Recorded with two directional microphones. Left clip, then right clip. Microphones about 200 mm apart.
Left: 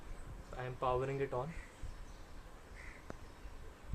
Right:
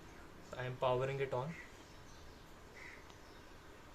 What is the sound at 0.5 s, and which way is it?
Speech, 20° left (ahead or behind).